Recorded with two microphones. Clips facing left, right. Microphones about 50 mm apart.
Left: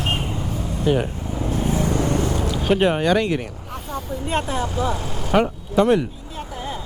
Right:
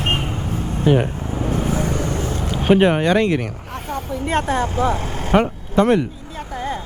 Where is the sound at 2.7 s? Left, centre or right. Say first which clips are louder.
Right 4 dB; centre.